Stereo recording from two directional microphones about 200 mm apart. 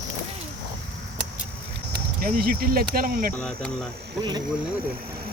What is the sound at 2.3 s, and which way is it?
Speech, 45° right (ahead or behind).